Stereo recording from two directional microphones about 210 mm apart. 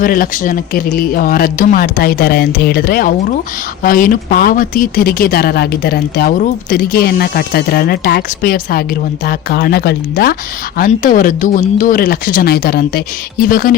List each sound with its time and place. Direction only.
0.0 s speech: 40° left (ahead or behind)